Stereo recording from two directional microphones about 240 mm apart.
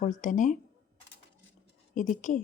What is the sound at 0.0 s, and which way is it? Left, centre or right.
Speech, left.